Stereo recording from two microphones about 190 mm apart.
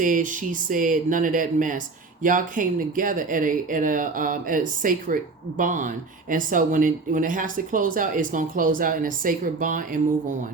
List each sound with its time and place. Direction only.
0.0 s speech: 45° right (ahead or behind)